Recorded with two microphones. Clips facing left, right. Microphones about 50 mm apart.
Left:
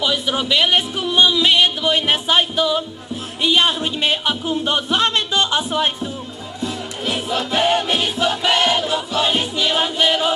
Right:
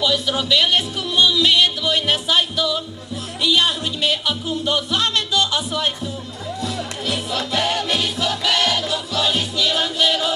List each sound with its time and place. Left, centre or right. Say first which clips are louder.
0.0 s music: even; left
3.4 s speech: left 2 dB; left
6.6 s music: left 3 dB; left